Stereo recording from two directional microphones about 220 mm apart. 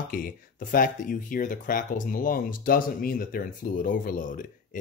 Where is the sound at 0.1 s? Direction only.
40° left (ahead or behind).